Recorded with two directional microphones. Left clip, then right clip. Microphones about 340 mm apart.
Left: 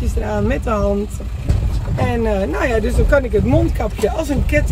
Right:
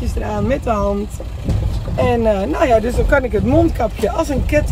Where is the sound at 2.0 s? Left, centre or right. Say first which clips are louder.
Right 3 dB; centre.